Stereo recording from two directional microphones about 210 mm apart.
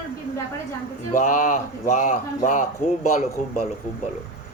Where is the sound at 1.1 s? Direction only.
35° left (ahead or behind).